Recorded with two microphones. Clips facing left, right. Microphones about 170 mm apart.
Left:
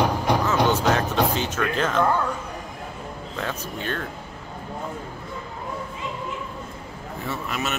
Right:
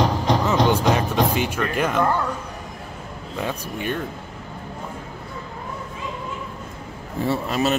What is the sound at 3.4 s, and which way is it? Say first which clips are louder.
Speech: right 3 dB; 15° right (ahead or behind).